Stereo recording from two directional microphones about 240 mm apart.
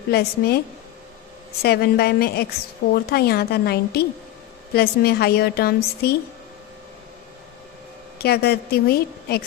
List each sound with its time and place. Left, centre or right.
0.1 s a woman's voice: left
1.6 s a woman's voice: left
8.2 s a woman's voice: left